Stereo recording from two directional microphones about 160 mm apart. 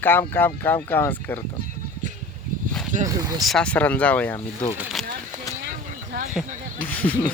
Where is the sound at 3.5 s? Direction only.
5° left (ahead or behind).